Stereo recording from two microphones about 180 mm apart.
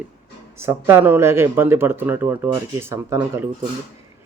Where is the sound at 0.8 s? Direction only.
15° right (ahead or behind).